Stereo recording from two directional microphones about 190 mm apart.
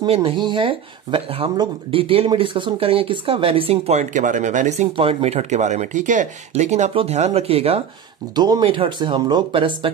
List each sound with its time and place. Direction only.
0.0 s speech: 30° right (ahead or behind)